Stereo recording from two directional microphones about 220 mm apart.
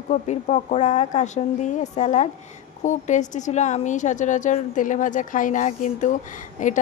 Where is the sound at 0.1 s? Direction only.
35° left (ahead or behind).